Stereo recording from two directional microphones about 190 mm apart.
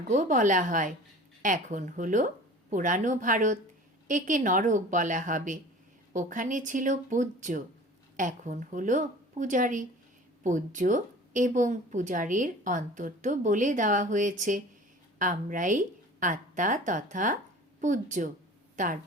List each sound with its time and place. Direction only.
0.1 s a woman's voice: 40° right (ahead or behind)